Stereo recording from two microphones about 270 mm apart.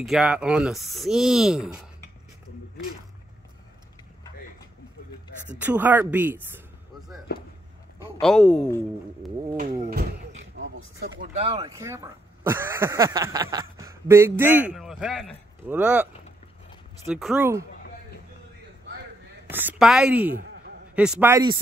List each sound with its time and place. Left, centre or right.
0.0 s speech: centre
5.5 s speech: centre
8.2 s speech: centre
9.6 s speech: right
11.3 s speech: centre
19.5 s speech: centre